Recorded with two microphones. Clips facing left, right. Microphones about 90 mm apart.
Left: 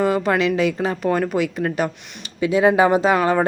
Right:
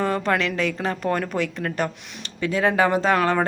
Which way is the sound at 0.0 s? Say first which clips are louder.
Left 4 dB; 5° left (ahead or behind).